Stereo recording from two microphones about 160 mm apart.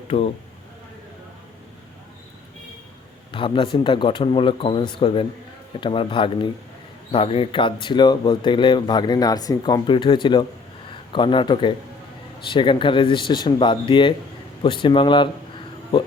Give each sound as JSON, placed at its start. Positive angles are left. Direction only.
{"t": 3.3, "sound": "speech", "side_deg": 30}